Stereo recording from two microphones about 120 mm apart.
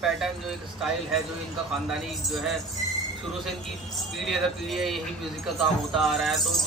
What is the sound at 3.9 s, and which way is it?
A man's voice, centre (ahead or behind).